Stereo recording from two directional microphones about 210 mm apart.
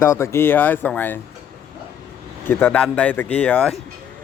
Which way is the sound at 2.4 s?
5° left (ahead or behind).